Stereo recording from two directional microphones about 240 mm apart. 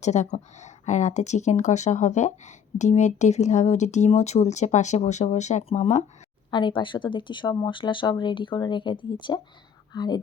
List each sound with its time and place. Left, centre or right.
0.0 s a woman's voice: left